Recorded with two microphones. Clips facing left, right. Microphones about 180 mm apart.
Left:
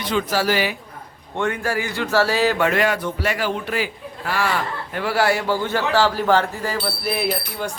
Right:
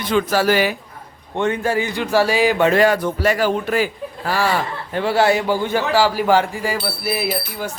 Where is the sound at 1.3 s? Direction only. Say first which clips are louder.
Right 4 dB; 20° right (ahead or behind).